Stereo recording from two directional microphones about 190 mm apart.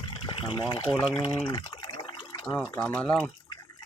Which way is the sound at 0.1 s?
25° left (ahead or behind).